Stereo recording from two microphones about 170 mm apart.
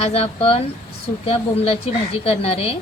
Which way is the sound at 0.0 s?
35° left (ahead or behind).